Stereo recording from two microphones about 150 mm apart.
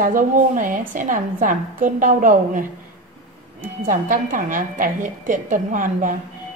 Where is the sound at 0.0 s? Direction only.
65° right (ahead or behind).